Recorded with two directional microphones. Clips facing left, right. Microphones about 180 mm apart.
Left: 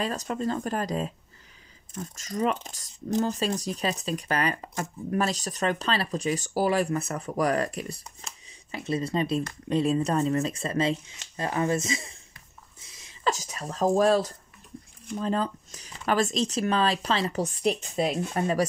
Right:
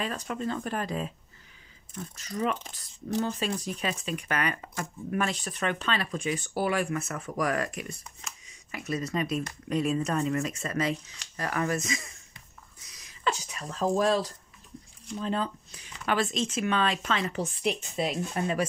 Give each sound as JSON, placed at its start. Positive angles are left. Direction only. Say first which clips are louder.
{"t": 0.0, "sound": "speech", "louder": "left 3 dB", "side_deg": 40}
{"t": 12.8, "sound": "a sound", "louder": "left 1 dB", "side_deg": 25}
{"t": 13.3, "sound": "speech", "louder": "left 3 dB", "side_deg": 40}